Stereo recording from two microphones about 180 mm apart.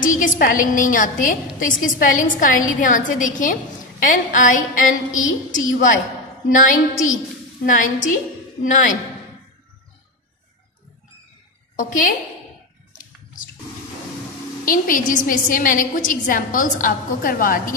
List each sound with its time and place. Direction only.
0.0 s a woman's voice: 50° left (ahead or behind)
14.6 s a woman's voice: 50° left (ahead or behind)